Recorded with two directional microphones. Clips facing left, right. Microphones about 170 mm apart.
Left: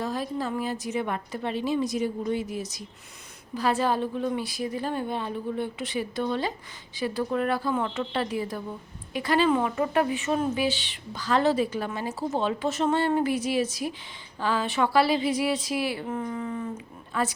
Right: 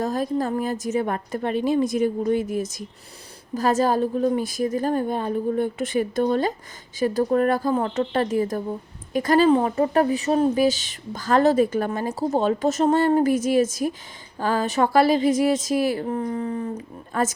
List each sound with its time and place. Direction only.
0.0 s speech: 45° right (ahead or behind)